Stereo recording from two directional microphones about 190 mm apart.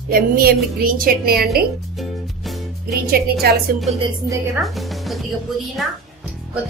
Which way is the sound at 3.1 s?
55° right (ahead or behind).